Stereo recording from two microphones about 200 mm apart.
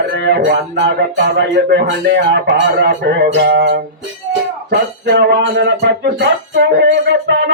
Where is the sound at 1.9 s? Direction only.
55° right (ahead or behind).